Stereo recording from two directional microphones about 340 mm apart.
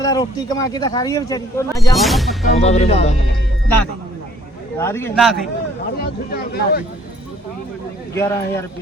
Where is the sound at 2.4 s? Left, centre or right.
Centre.